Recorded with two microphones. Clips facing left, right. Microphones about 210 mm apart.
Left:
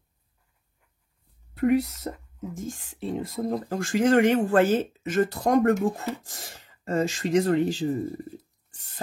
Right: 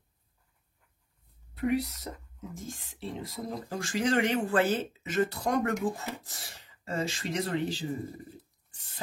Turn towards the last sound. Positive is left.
turn(degrees=45)  # may be behind; listen again after turning